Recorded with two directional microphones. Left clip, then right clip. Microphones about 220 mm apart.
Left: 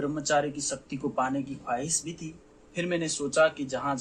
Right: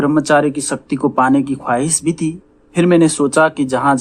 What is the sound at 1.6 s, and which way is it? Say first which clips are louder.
Speech: right 14 dB; 30° right (ahead or behind).